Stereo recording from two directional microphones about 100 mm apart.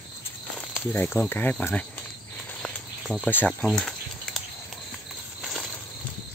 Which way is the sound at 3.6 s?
Centre (ahead or behind).